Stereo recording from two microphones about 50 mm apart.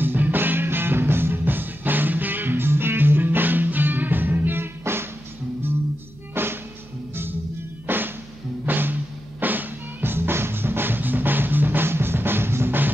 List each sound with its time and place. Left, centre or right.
0.0 s music: right
6.3 s music: right
7.8 s music: right